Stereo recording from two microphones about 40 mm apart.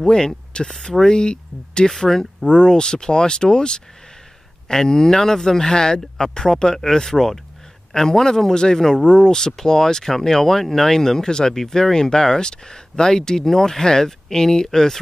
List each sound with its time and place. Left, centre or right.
0.0 s speech: centre
1.9 s speech: centre
2.4 s speech: left